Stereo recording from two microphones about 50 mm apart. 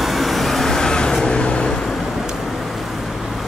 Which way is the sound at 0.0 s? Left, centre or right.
Centre.